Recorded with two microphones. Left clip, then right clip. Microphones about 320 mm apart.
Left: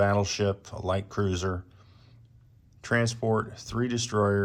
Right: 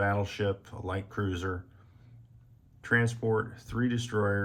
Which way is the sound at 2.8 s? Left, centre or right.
Centre.